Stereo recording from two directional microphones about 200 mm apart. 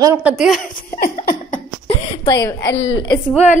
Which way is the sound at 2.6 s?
70° left (ahead or behind).